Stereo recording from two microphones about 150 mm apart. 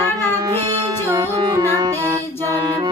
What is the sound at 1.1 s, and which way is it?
Music, 30° right (ahead or behind).